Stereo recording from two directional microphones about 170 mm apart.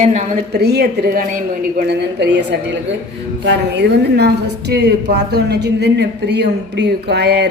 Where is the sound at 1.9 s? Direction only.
85° right.